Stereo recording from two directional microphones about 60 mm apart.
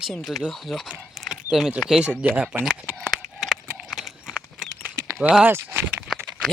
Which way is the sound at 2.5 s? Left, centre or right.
Right.